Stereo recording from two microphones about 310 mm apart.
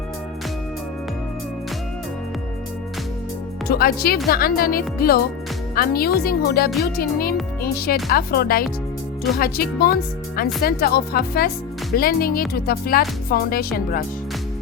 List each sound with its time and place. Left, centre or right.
3.7 s speech: left